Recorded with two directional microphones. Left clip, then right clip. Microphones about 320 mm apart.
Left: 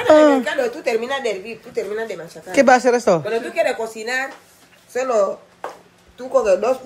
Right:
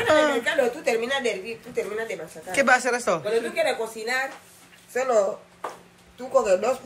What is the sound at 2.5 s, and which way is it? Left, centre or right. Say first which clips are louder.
Speech: left 7 dB; centre.